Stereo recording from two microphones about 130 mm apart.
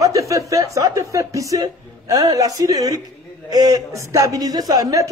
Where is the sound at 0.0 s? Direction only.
25° right (ahead or behind).